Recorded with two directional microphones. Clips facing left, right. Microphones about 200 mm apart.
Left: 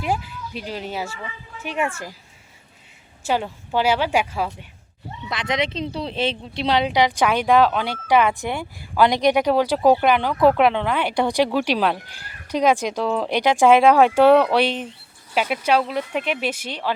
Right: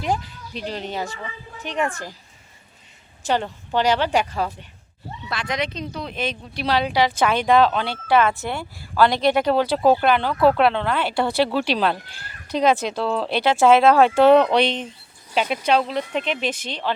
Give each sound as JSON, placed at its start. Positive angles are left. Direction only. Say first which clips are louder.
{"t": 0.0, "sound": "speech", "louder": "even", "side_deg": 10}
{"t": 3.2, "sound": "speech", "louder": "even", "side_deg": 5}
{"t": 5.3, "sound": "speech", "louder": "left 2 dB", "side_deg": 20}